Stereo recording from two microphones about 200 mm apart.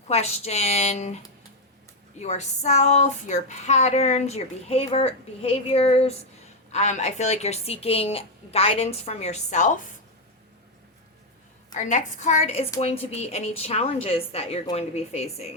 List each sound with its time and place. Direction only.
0.1 s speech: 30° left (ahead or behind)
2.1 s speech: 35° left (ahead or behind)
11.7 s speech: 35° left (ahead or behind)